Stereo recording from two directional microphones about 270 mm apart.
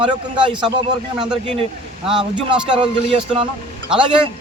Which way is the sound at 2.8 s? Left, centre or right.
Centre.